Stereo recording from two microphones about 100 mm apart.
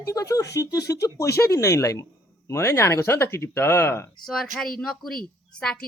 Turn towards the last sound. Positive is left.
turn(degrees=10)  # may be behind; listen again after turning